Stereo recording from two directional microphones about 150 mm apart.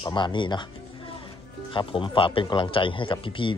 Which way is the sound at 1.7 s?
35° left (ahead or behind).